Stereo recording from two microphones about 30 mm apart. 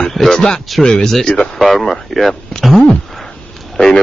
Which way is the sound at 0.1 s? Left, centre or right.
Centre.